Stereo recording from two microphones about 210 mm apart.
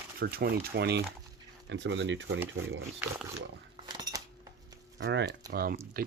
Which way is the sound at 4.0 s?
15° right (ahead or behind).